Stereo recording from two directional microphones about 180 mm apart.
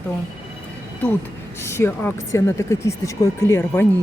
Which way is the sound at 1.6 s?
15° left (ahead or behind).